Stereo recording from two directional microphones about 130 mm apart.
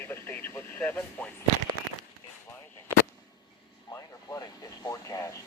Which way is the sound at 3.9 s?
20° left (ahead or behind).